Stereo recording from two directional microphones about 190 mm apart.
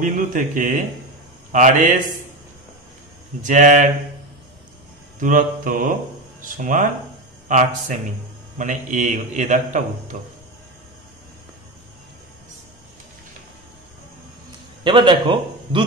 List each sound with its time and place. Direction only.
0.0 s a man's voice: 40° right (ahead or behind)
3.4 s a man's voice: 40° right (ahead or behind)
5.2 s a man's voice: 45° right (ahead or behind)
14.8 s a man's voice: 25° right (ahead or behind)